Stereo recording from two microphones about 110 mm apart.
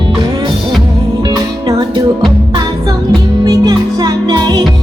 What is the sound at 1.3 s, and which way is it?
Music, 35° right (ahead or behind).